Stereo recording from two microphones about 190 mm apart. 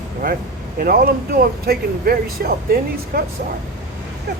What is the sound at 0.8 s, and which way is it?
Speech, 50° right (ahead or behind).